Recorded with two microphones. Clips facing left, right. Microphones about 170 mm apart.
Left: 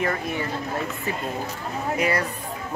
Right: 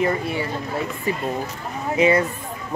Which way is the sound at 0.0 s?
10° right (ahead or behind).